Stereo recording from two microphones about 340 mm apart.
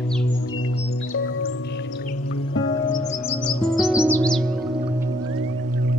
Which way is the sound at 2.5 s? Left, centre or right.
Centre.